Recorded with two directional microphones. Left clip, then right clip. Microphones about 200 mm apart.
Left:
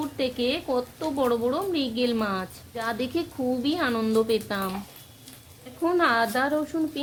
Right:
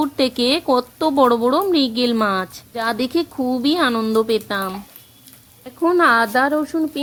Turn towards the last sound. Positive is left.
turn(degrees=-25)  # may be behind; listen again after turning